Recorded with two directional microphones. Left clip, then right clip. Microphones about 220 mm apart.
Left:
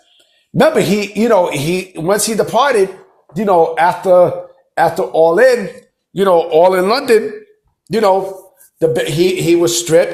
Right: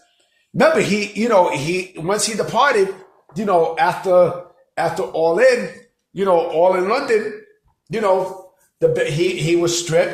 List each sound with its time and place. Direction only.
0.6 s a man's voice: 30° left (ahead or behind)